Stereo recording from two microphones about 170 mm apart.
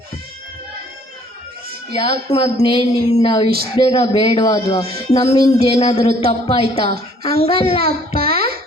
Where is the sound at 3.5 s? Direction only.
65° right (ahead or behind).